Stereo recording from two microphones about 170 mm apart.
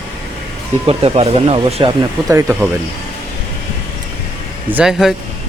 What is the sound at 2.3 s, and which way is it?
Speech, 15° right (ahead or behind).